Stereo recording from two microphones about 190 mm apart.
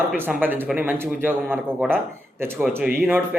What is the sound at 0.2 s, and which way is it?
Speech, 10° right (ahead or behind).